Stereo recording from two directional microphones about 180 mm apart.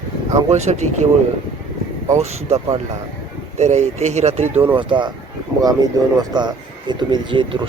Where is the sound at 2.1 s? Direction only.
35° right (ahead or behind).